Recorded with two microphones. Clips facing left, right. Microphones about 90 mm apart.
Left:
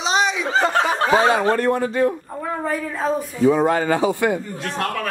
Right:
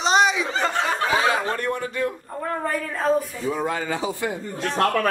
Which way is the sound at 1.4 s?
45° left (ahead or behind).